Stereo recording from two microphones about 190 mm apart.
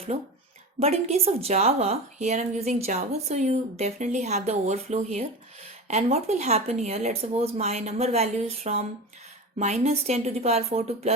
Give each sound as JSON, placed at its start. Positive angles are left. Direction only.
{"t": 0.8, "sound": "speech", "side_deg": -35}